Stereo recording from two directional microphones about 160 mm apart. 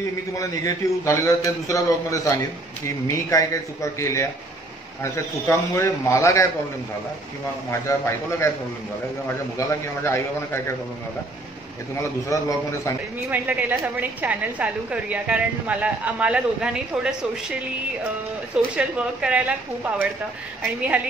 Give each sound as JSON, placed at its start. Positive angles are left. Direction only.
{"t": 0.4, "sound": "a man's voice", "side_deg": 20}
{"t": 7.7, "sound": "a man's voice", "side_deg": 15}
{"t": 9.6, "sound": "a man's voice", "side_deg": 15}
{"t": 12.3, "sound": "a man's voice", "side_deg": 20}
{"t": 13.3, "sound": "a woman's voice", "side_deg": -10}
{"t": 18.8, "sound": "a woman's voice", "side_deg": -5}